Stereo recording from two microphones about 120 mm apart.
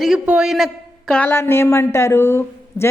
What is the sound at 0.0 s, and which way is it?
A man's voice, 5° right (ahead or behind).